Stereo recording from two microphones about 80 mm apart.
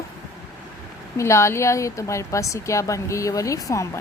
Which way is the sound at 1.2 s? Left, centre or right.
Left.